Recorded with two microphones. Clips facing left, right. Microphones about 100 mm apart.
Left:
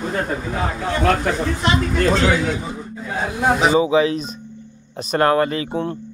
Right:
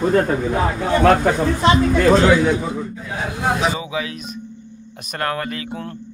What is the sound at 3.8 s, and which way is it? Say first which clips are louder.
Speech: left 10 dB; 30° left (ahead or behind).